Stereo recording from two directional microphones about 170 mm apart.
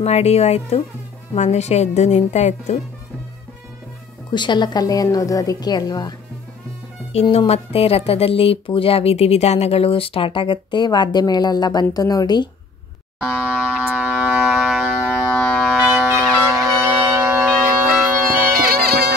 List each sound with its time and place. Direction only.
0.0 s speech: 40° left (ahead or behind)
4.3 s a woman's voice: 25° left (ahead or behind)
7.1 s speech: 35° left (ahead or behind)
13.2 s a sound: 5° right (ahead or behind)
16.0 s music: 15° right (ahead or behind)
18.5 s music: 60° right (ahead or behind)